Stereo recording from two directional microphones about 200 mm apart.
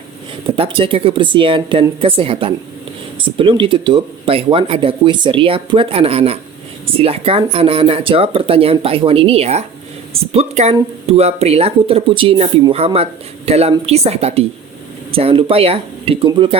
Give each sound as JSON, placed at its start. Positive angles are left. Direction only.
{"t": 0.4, "sound": "speech", "side_deg": -25}